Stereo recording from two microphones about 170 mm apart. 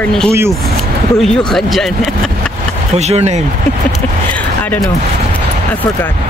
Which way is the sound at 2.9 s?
40° right (ahead or behind).